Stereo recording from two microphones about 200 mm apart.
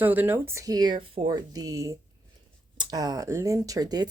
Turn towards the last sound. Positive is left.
turn(degrees=-20)  # may be behind; listen again after turning